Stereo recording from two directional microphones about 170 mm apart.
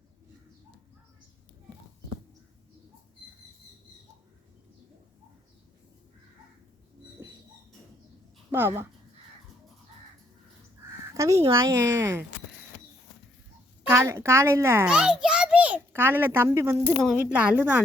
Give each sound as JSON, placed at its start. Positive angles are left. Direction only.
{"t": 8.4, "sound": "speech", "side_deg": -15}
{"t": 11.1, "sound": "crow", "side_deg": -20}
{"t": 11.5, "sound": "a woman's voice", "side_deg": -15}
{"t": 13.9, "sound": "a child's voice", "side_deg": -15}